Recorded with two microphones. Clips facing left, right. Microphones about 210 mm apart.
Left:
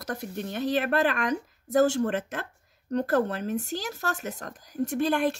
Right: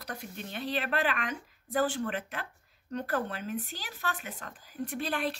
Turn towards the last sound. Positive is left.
turn(degrees=45)  # may be behind; listen again after turning